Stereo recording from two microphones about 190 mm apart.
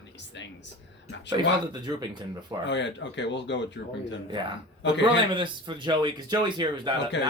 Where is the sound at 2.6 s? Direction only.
70° left (ahead or behind).